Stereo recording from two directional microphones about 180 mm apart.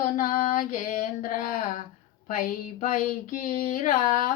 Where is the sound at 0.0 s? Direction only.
50° left (ahead or behind).